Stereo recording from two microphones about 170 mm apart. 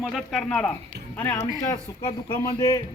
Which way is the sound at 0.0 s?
Centre (ahead or behind).